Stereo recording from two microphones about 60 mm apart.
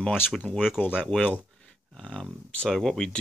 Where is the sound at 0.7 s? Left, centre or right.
Left.